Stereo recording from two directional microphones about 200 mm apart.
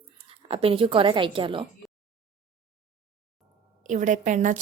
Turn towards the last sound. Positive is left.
turn(degrees=-40)  # may be behind; listen again after turning